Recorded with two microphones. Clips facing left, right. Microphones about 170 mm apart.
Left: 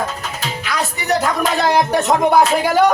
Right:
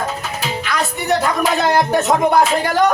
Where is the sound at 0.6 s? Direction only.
Centre (ahead or behind).